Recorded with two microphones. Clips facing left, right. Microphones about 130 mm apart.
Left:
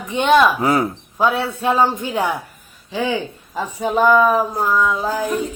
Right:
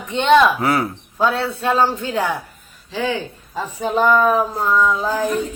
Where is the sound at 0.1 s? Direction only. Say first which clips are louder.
Even; 10° left (ahead or behind).